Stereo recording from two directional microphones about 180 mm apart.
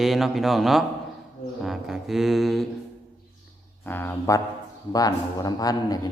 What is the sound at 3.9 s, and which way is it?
A man's voice, 10° left (ahead or behind).